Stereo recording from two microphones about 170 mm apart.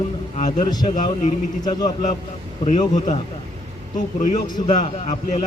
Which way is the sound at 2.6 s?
45° left (ahead or behind).